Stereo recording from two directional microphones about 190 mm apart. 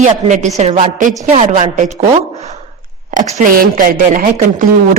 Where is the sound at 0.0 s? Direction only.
40° right (ahead or behind).